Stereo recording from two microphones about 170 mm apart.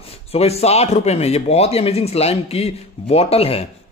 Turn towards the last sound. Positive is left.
turn(degrees=35)  # may be behind; listen again after turning